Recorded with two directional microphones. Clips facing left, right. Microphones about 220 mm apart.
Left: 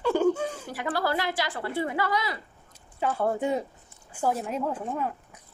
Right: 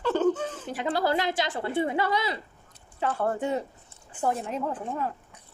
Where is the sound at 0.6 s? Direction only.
20° right (ahead or behind).